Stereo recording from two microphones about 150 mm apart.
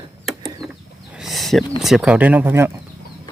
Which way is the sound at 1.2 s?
Centre (ahead or behind).